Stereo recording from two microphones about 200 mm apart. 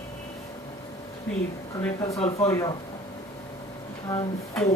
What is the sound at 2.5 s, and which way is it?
Speech, 15° left (ahead or behind).